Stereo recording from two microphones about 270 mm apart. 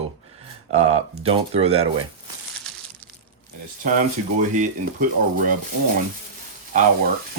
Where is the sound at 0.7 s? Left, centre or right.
Right.